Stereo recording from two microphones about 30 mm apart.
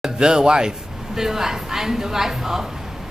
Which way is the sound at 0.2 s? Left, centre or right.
Right.